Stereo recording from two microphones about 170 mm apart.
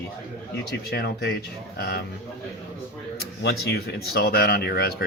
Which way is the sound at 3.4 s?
70° left (ahead or behind).